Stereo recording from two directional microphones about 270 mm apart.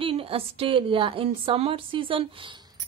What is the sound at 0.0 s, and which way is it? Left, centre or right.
A woman's voice, right.